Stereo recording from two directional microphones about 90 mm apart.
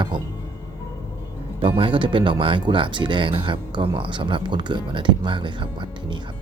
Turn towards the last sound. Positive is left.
turn(degrees=-65)  # may be behind; listen again after turning